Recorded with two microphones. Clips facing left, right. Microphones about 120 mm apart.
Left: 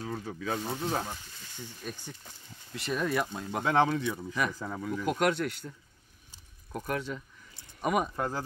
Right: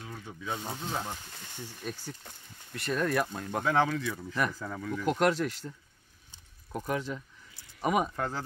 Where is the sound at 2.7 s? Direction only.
5° left (ahead or behind).